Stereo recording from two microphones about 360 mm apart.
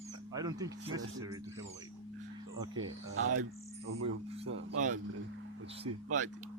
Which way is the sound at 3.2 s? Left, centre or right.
Right.